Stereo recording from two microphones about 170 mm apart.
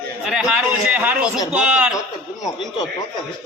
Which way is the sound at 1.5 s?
5° right (ahead or behind).